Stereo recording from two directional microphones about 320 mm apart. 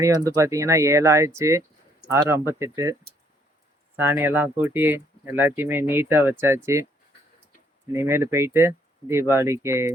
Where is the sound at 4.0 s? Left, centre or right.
Centre.